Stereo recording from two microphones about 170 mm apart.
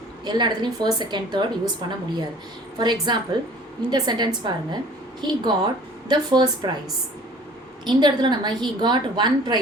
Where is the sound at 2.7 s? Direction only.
25° right (ahead or behind).